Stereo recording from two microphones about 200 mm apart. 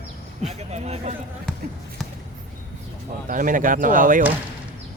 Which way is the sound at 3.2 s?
40° right (ahead or behind).